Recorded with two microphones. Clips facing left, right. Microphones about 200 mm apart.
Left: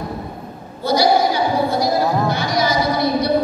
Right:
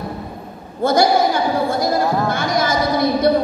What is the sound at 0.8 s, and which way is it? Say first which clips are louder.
Music: right 1 dB; 50° right (ahead or behind).